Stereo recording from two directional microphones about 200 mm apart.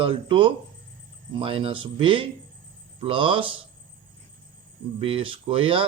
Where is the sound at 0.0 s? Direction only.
25° right (ahead or behind).